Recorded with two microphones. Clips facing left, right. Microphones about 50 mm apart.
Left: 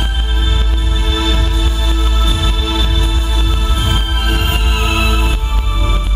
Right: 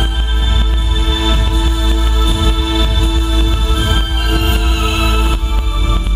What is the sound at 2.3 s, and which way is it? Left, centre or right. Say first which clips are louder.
Music: right 4 dB; centre.